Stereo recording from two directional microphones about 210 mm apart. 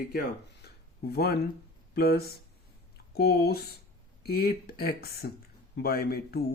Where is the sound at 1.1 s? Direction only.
50° left (ahead or behind).